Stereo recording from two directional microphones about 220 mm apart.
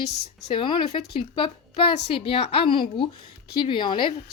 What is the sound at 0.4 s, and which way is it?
A woman's voice, 20° left (ahead or behind).